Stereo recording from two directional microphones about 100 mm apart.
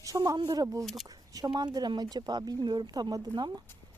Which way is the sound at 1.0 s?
40° right (ahead or behind).